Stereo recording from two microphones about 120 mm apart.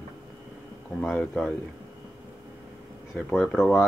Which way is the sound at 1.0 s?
5° left (ahead or behind).